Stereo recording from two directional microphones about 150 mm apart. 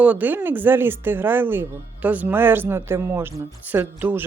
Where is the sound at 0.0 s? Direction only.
10° right (ahead or behind).